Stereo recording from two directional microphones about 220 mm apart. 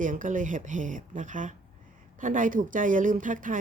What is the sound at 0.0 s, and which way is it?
A woman's voice, 35° right (ahead or behind).